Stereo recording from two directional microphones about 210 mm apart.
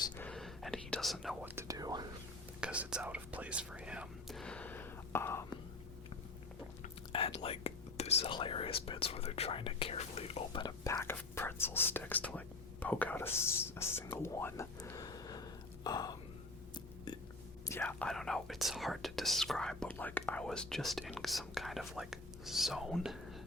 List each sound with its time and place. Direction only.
0.2 s whispering: 5° left (ahead or behind)
1.5 s whispering: 15° right (ahead or behind)
2.6 s whispering: 5° right (ahead or behind); by 5.5 s 10° left (ahead or behind)
6.8 s speech: 30° left (ahead or behind)
17.1 s a sound: 20° left (ahead or behind)
17.7 s speech: 10° left (ahead or behind)